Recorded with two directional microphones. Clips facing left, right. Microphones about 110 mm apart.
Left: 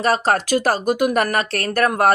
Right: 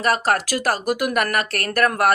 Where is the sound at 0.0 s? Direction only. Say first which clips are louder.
Left 2 dB; 25° left (ahead or behind).